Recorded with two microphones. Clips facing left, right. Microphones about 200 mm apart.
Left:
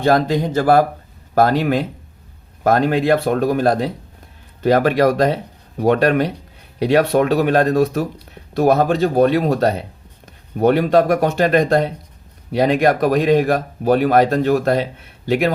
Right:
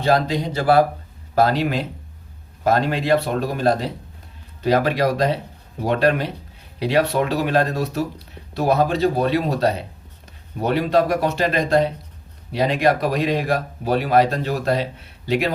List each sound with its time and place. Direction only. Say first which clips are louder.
0.0 s speech: left 3 dB; 50° left (ahead or behind)